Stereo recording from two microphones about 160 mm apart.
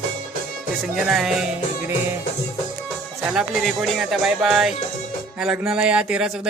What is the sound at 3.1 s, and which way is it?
Speech, centre (ahead or behind).